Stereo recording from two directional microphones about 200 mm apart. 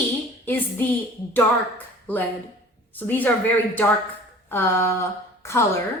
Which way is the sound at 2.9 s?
10° left (ahead or behind).